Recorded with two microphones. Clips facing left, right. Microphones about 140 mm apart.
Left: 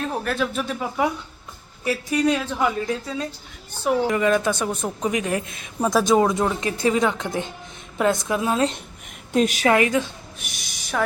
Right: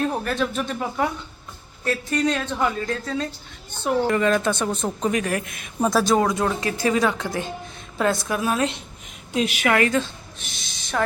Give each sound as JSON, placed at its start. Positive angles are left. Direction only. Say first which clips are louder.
{"t": 0.0, "sound": "a woman's voice", "louder": "right 1 dB", "side_deg": 0}
{"t": 9.3, "sound": "a woman's voice", "louder": "left 4 dB", "side_deg": 45}
{"t": 9.6, "sound": "a woman's voice", "louder": "right 2 dB", "side_deg": 20}